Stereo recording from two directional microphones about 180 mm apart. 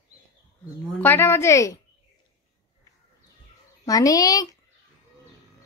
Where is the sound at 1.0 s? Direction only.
10° left (ahead or behind).